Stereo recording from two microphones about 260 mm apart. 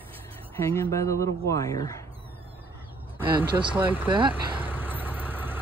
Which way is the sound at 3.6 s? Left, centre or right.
Centre.